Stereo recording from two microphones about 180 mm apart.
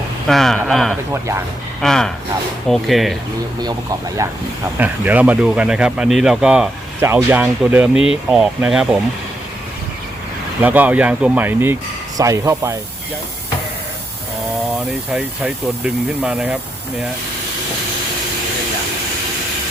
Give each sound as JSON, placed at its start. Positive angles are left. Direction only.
{"t": 0.3, "sound": "a man's voice", "side_deg": 0}
{"t": 3.6, "sound": "speech", "side_deg": -20}
{"t": 4.8, "sound": "a man's voice", "side_deg": -10}
{"t": 10.6, "sound": "speech", "side_deg": -10}
{"t": 15.1, "sound": "speech", "side_deg": -5}